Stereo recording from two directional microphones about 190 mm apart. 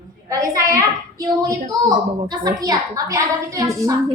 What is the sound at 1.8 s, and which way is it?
A woman's voice, 20° right (ahead or behind).